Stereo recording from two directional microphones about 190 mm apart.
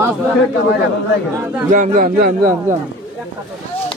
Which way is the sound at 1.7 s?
45° right (ahead or behind).